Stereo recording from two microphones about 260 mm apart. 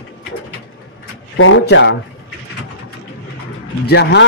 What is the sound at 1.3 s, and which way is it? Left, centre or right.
Speech, left.